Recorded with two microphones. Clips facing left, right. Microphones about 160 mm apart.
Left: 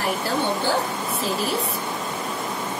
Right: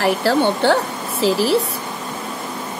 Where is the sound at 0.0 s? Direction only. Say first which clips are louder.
Right 8 dB; 90° right.